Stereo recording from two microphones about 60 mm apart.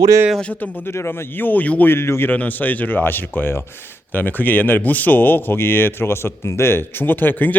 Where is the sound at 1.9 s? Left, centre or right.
Left.